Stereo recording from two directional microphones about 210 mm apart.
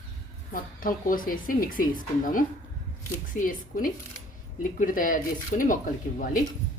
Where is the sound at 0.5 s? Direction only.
40° left (ahead or behind).